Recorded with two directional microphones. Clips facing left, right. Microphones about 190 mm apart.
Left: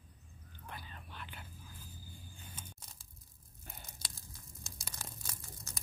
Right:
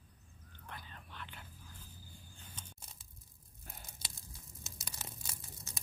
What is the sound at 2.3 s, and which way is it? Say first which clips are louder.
Scissors: even; 10° left (ahead or behind).